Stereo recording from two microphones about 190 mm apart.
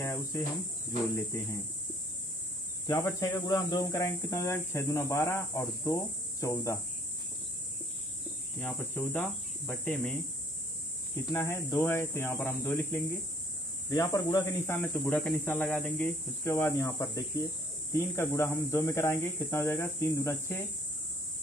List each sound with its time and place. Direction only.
0.0 s cricket: 15° left (ahead or behind)
1.1 s speech: 15° left (ahead or behind)
2.9 s speech: 15° left (ahead or behind)
8.5 s speech: 10° left (ahead or behind)
11.3 s speech: 15° left (ahead or behind)
13.8 s speech: 15° left (ahead or behind)